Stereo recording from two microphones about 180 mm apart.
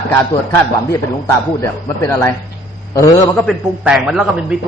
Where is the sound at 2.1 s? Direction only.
10° left (ahead or behind).